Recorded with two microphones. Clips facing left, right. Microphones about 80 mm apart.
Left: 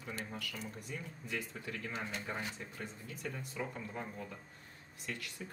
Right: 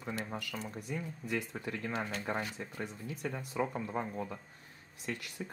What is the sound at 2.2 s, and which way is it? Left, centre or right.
Speech, right.